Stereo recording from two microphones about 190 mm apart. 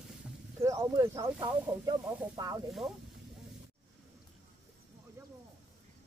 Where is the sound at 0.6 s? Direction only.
15° right (ahead or behind).